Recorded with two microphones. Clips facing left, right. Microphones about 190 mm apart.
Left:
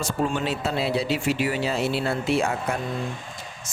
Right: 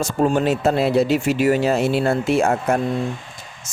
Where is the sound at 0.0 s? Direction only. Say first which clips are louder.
Right 7 dB; 45° right (ahead or behind).